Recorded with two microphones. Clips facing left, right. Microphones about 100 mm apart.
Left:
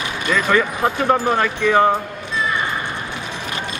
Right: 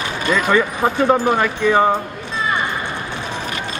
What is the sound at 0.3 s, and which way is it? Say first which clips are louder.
Speech: right 1 dB; 15° right (ahead or behind).